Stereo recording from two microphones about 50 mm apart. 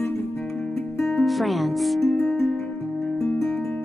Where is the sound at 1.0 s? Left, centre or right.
Centre.